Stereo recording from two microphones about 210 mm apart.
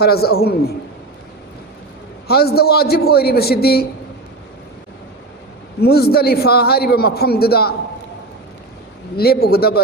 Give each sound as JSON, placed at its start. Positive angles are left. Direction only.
{"t": 0.0, "sound": "a man's voice", "side_deg": 50}
{"t": 2.2, "sound": "a man's voice", "side_deg": 50}
{"t": 5.8, "sound": "a man's voice", "side_deg": 50}
{"t": 9.1, "sound": "a man's voice", "side_deg": 50}